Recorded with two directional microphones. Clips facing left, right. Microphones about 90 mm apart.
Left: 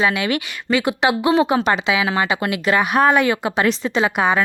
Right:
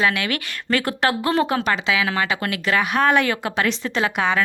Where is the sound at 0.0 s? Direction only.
15° left (ahead or behind).